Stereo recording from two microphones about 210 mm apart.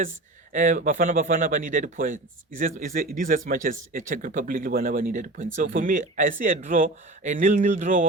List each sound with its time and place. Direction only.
0.5 s speech: 40° right (ahead or behind)